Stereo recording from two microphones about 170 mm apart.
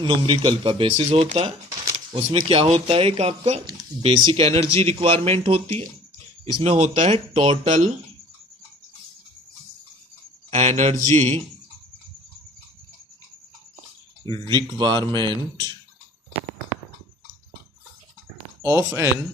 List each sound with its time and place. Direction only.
0.0 s speech: 30° right (ahead or behind)
3.6 s speech: 25° right (ahead or behind); by 7.9 s 45° right (ahead or behind)
10.5 s speech: 40° right (ahead or behind)
14.4 s a man's voice: 25° right (ahead or behind)
18.6 s speech: 15° right (ahead or behind)